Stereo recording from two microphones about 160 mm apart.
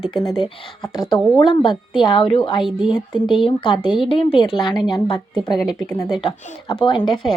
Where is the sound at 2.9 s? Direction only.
30° left (ahead or behind).